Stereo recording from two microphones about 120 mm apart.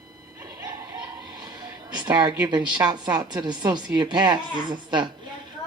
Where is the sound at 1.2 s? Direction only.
35° right (ahead or behind).